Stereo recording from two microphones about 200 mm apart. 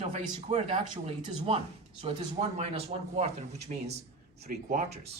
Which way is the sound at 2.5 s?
30° right (ahead or behind).